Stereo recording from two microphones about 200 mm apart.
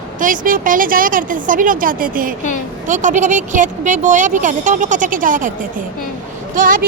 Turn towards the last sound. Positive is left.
turn(degrees=-45)  # may be behind; listen again after turning